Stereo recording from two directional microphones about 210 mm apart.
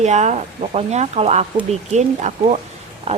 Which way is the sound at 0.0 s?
35° right (ahead or behind).